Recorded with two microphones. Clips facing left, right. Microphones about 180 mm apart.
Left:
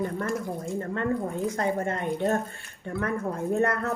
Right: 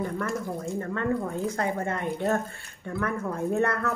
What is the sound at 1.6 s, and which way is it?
Speech, 25° left (ahead or behind).